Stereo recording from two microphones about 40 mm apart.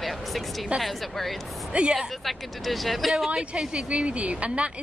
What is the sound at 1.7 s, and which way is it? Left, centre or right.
Speech, right.